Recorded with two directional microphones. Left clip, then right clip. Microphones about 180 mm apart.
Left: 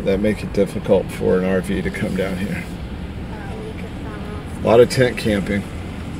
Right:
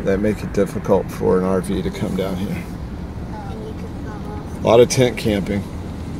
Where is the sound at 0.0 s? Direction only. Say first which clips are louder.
Even; 55° right (ahead or behind).